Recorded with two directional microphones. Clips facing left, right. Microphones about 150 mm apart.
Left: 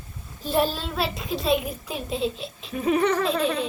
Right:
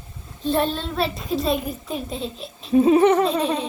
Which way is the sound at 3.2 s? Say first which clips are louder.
Right 3 dB; centre (ahead or behind).